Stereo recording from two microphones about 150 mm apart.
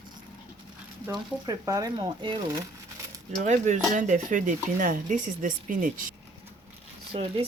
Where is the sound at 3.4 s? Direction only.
55° right (ahead or behind).